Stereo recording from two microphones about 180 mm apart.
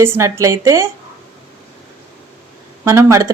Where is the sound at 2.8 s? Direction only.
15° right (ahead or behind).